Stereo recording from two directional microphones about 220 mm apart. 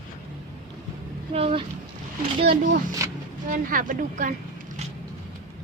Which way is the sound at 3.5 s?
40° right (ahead or behind).